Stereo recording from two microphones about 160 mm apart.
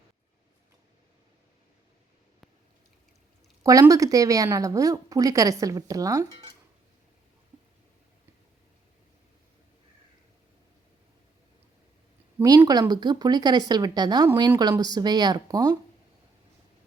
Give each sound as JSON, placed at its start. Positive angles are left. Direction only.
{"t": 3.6, "sound": "a woman's voice", "side_deg": -20}
{"t": 12.4, "sound": "a woman's voice", "side_deg": -25}